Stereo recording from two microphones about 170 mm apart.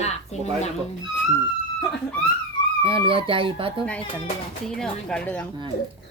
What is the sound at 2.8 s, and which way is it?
Speech, 30° right (ahead or behind).